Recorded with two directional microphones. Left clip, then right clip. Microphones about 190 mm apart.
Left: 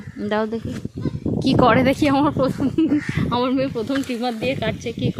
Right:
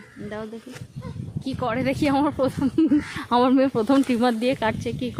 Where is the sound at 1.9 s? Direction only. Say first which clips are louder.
Left 4 dB; 15° left (ahead or behind).